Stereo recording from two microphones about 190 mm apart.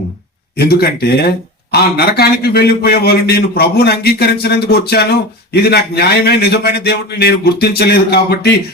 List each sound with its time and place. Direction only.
0.5 s a man's voice: 55° left (ahead or behind)